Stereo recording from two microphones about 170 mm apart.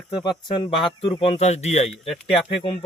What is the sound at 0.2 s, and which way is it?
A man's voice, 25° left (ahead or behind).